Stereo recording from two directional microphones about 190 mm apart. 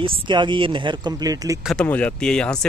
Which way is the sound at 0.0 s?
25° right (ahead or behind).